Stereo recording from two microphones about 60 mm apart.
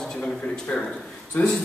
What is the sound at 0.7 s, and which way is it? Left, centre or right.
Speech, centre.